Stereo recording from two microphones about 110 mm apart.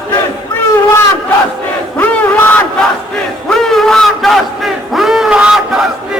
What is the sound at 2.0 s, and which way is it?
Crowd, 15° left (ahead or behind).